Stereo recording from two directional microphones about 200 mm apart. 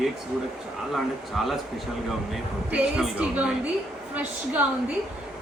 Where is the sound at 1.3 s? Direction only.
Centre (ahead or behind).